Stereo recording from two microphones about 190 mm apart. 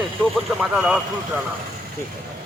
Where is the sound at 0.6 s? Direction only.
5° right (ahead or behind).